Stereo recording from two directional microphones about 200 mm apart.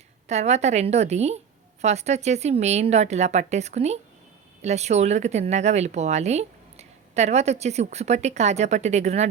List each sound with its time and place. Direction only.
0.3 s speech: 35° right (ahead or behind)